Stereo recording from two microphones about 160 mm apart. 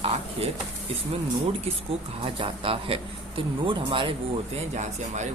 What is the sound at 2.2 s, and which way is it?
Speech, 35° right (ahead or behind).